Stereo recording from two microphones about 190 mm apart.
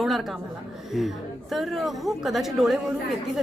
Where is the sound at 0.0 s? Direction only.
Centre (ahead or behind).